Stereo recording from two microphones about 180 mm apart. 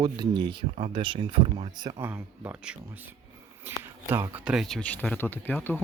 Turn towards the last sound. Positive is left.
turn(degrees=10)  # may be behind; listen again after turning